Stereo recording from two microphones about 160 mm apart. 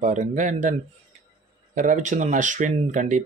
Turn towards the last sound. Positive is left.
turn(degrees=-50)  # may be behind; listen again after turning